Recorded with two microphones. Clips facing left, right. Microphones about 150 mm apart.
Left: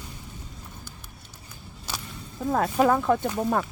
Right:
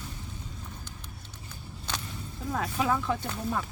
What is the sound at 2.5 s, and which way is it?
Speech, 50° left (ahead or behind).